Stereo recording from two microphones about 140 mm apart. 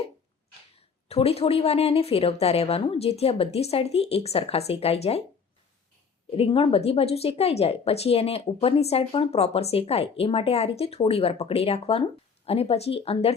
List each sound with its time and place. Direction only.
0.8 s speech: 45° left (ahead or behind)
6.3 s speech: 45° left (ahead or behind)